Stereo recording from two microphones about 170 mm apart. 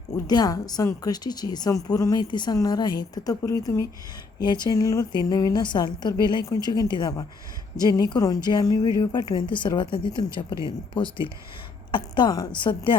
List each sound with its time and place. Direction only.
0.3 s a woman's voice: 20° left (ahead or behind)